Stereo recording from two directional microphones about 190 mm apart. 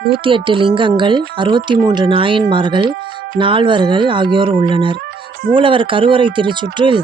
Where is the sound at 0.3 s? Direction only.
25° right (ahead or behind).